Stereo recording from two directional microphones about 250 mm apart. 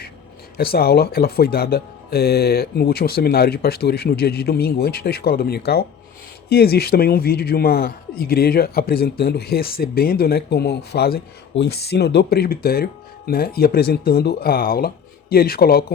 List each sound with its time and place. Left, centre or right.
0.5 s speech: left